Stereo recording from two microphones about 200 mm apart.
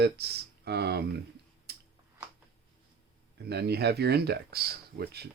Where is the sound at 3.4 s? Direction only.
55° right (ahead or behind).